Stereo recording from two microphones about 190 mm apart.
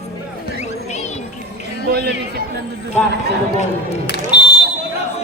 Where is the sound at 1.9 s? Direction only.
55° right (ahead or behind).